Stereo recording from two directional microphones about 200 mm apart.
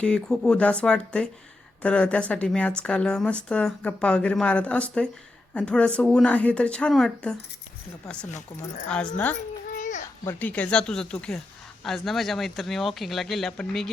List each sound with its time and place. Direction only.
0.0 s a woman's voice: 5° left (ahead or behind)
8.3 s speech: 35° left (ahead or behind)
8.9 s a woman's voice: 5° left (ahead or behind)
9.7 s a sound: 40° left (ahead or behind)
10.2 s a woman's voice: 10° left (ahead or behind)